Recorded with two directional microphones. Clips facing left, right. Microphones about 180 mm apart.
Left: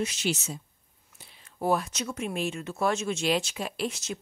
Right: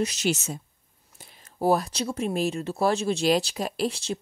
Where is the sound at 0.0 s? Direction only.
40° right (ahead or behind).